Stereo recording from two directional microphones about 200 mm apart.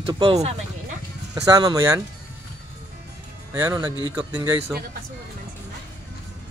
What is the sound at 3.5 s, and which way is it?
Speech, 15° right (ahead or behind).